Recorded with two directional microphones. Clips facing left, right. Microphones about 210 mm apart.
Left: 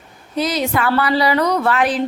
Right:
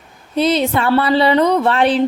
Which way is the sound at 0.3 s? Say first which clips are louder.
Right 4 dB; 30° right (ahead or behind).